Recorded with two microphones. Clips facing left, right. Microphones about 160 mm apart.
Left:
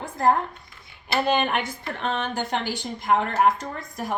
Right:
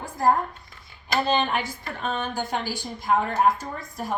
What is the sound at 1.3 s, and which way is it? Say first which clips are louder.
A woman's voice: left 2 dB; 60° left (ahead or behind).